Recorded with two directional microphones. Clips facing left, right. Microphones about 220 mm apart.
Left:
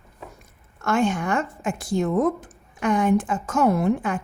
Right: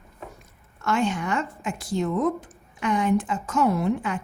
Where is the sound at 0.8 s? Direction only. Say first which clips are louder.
Left 3 dB; 50° left (ahead or behind).